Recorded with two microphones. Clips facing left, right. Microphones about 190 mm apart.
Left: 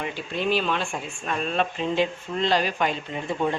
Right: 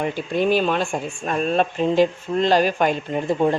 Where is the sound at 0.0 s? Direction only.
45° right (ahead or behind).